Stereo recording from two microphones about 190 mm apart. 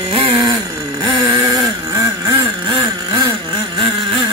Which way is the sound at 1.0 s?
20° right (ahead or behind).